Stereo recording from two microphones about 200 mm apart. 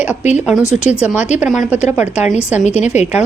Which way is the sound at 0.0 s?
10° right (ahead or behind).